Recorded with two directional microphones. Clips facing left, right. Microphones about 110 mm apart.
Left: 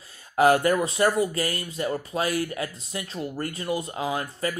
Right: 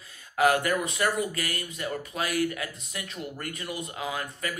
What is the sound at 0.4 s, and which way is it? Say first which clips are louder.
Speech: left 4 dB; 30° left (ahead or behind).